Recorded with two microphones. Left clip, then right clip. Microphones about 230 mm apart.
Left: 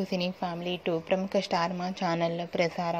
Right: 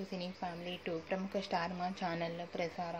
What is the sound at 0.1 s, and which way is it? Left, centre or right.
A woman's voice, left.